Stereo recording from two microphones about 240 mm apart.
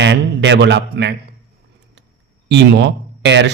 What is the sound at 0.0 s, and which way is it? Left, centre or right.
Speech, right.